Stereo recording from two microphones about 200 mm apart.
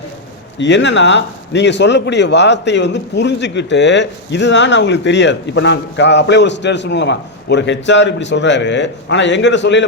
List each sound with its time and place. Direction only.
0.6 s speech: 60° left (ahead or behind)